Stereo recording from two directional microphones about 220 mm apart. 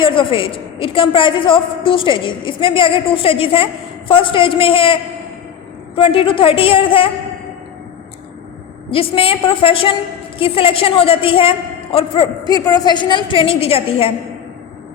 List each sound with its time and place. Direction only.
0.0 s a woman's voice: 25° left (ahead or behind)
6.0 s a woman's voice: 25° left (ahead or behind)
8.9 s a woman's voice: 25° left (ahead or behind)